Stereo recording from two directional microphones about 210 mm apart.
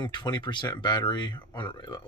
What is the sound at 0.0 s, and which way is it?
Speech, 20° left (ahead or behind).